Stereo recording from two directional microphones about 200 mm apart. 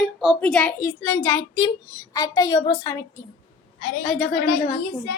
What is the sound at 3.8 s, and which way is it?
Speech, 40° left (ahead or behind).